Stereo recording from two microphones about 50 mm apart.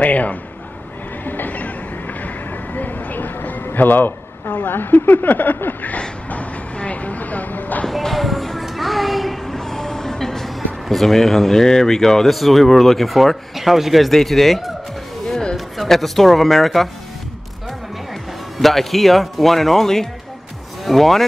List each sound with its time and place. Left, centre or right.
0.0 s a man's voice: left
1.2 s train: left
3.6 s a man's voice: left
7.9 s speech: centre
15.2 s a sound: centre
15.5 s speech: centre
18.6 s speech: centre